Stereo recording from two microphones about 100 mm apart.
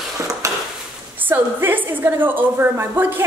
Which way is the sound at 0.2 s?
30° right (ahead or behind).